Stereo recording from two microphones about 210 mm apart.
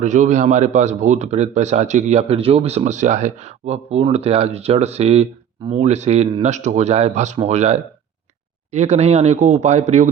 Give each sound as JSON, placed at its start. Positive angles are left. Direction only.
{"t": 0.0, "sound": "a man's voice", "side_deg": -35}